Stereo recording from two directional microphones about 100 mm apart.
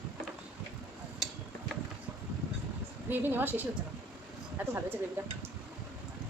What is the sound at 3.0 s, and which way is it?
A woman's voice, 20° right (ahead or behind).